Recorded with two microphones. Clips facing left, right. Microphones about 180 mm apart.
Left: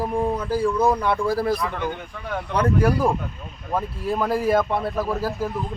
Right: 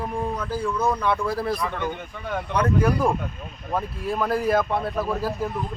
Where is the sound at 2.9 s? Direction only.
5° left (ahead or behind).